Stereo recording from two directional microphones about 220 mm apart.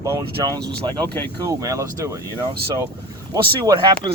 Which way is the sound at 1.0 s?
10° left (ahead or behind).